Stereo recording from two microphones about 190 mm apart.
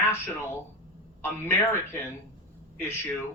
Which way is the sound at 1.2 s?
10° left (ahead or behind).